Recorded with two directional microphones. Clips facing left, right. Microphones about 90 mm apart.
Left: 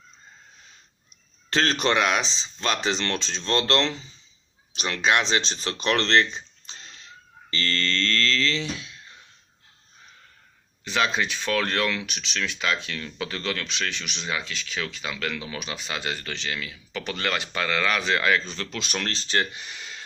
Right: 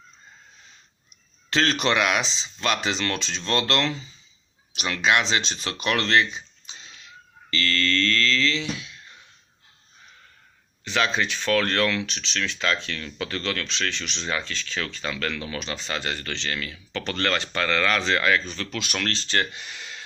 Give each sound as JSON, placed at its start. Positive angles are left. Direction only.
{"t": 1.8, "sound": "speech", "side_deg": 30}
{"t": 5.8, "sound": "a sound", "side_deg": 30}
{"t": 7.5, "sound": "music", "side_deg": 25}
{"t": 10.8, "sound": "speech", "side_deg": 20}